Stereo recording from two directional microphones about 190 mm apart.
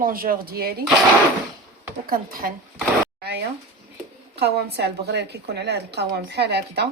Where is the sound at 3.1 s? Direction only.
60° right (ahead or behind).